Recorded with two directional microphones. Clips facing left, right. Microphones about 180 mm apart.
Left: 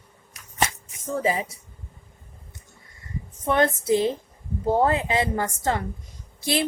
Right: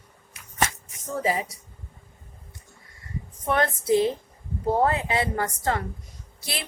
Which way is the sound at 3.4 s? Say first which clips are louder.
Left 2 dB; 25° left (ahead or behind).